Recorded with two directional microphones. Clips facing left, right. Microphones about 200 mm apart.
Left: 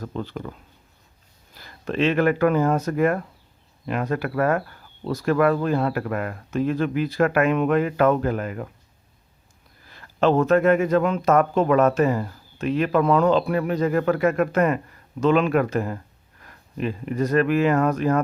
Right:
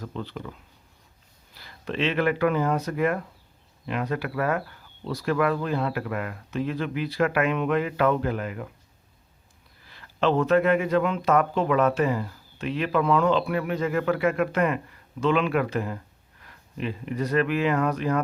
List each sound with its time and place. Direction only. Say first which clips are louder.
0.0 s speech: left 4 dB; 45° left (ahead or behind)
1.5 s speech: left 5 dB; 45° left (ahead or behind)
9.8 s speech: left 4 dB; 45° left (ahead or behind)